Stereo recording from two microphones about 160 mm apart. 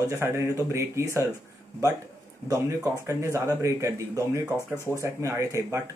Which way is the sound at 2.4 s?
20° right (ahead or behind).